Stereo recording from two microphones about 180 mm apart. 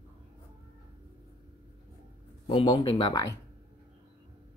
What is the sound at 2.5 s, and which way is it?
Speech, 30° left (ahead or behind).